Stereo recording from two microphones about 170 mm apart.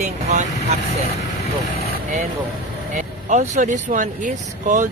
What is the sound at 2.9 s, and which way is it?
Speech, 45° right (ahead or behind).